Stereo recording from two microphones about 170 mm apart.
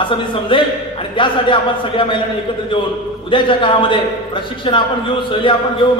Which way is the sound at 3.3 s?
30° left (ahead or behind).